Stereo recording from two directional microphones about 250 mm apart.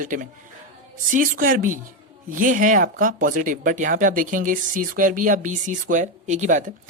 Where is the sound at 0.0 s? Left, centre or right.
Right.